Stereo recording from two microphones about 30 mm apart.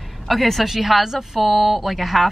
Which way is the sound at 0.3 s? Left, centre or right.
Centre.